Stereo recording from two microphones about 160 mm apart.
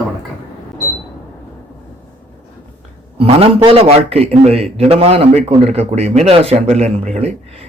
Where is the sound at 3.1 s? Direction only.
35° right (ahead or behind).